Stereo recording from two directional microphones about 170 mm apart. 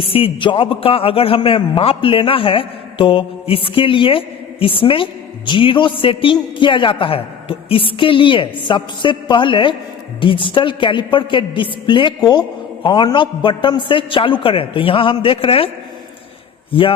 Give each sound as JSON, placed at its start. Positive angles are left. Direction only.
{"t": 0.0, "sound": "a man's voice", "side_deg": 30}